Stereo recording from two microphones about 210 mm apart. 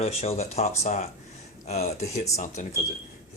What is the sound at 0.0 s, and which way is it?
Speech, 30° left (ahead or behind).